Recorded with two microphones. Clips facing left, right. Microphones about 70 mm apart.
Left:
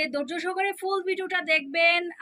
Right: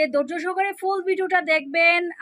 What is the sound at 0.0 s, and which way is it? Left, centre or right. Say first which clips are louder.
A woman's voice: right 7 dB; right.